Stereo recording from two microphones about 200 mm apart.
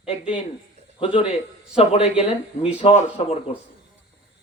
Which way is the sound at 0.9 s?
25° left (ahead or behind).